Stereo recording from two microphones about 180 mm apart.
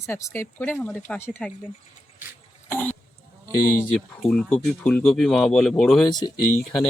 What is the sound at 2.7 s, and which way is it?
Dog, 10° left (ahead or behind).